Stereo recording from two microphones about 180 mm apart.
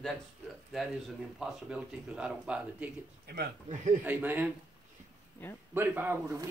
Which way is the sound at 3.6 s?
40° right (ahead or behind).